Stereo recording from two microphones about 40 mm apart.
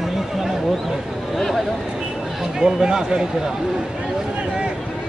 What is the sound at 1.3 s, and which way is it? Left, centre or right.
Speech, centre.